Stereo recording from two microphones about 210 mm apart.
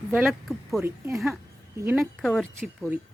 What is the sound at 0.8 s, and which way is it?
A woman's voice, 15° right (ahead or behind).